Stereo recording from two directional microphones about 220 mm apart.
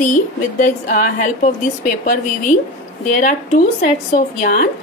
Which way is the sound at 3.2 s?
35° left (ahead or behind).